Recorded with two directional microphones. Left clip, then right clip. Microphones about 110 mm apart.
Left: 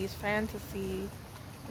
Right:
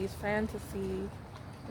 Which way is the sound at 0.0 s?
35° right (ahead or behind).